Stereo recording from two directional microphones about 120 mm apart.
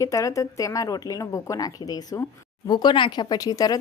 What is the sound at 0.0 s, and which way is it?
Speech, 25° left (ahead or behind).